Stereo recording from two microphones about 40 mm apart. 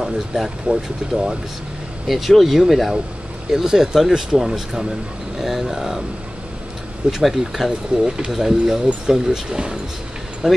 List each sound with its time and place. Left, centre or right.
0.0 s speech: centre
2.0 s speech: centre
7.2 s speech: centre